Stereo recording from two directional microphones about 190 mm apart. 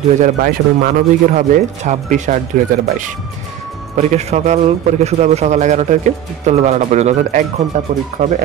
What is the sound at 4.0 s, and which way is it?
A man's voice, 35° right (ahead or behind).